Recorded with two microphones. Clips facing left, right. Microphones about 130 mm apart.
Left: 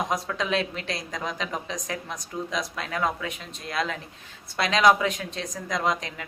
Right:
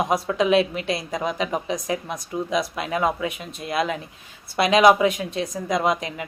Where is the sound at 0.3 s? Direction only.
15° right (ahead or behind).